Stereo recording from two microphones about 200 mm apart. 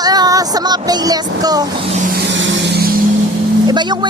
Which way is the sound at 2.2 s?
70° right (ahead or behind).